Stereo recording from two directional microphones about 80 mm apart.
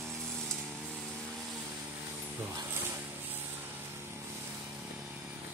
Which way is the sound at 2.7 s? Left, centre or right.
Right.